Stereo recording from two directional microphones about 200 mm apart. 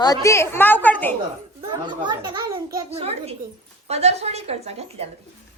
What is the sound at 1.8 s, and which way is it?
A child's voice, 25° right (ahead or behind).